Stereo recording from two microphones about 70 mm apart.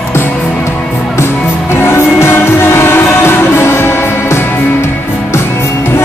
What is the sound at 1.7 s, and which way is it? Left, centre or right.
Music, left.